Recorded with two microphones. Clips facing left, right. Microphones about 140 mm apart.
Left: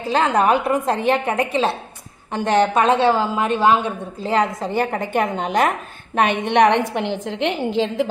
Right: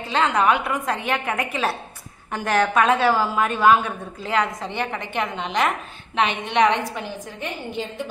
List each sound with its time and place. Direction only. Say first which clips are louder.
0.1 s a woman's voice: left 3 dB; 35° left (ahead or behind); by 6.8 s 60° left (ahead or behind)
6.9 s a woman's voice: left 8 dB; 70° left (ahead or behind); by 8.1 s 90° left